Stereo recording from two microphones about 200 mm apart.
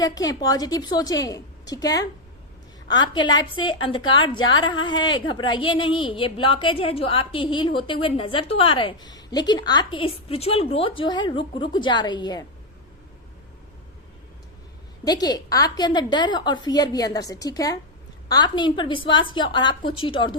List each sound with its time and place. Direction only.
0.0 s a woman's voice: 20° left (ahead or behind)
15.0 s a woman's voice: 20° left (ahead or behind)